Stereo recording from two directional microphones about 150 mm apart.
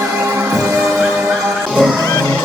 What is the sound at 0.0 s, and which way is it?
Music, 20° right (ahead or behind).